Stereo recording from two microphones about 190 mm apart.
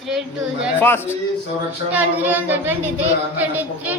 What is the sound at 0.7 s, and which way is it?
Speech, 10° left (ahead or behind).